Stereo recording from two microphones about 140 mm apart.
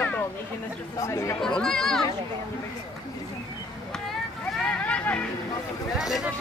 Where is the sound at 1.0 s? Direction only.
20° left (ahead or behind).